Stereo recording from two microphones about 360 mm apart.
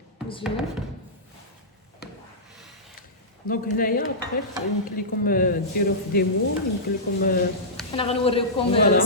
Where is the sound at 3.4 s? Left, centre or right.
Left.